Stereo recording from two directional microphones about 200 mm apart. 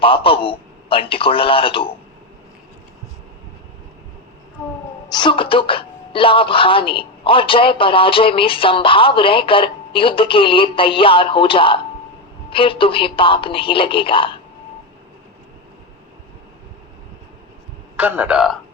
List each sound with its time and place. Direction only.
0.0 s speech: 25° left (ahead or behind)
5.1 s speech: 25° left (ahead or behind)
17.9 s a man's voice: 10° right (ahead or behind)